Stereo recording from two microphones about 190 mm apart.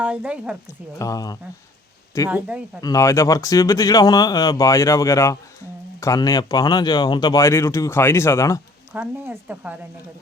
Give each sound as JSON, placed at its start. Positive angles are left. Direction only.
{"t": 0.0, "sound": "a woman's voice", "side_deg": -5}
{"t": 0.9, "sound": "speech", "side_deg": 20}
{"t": 2.3, "sound": "speech", "side_deg": -5}
{"t": 2.8, "sound": "speech", "side_deg": 15}
{"t": 8.9, "sound": "speech", "side_deg": -10}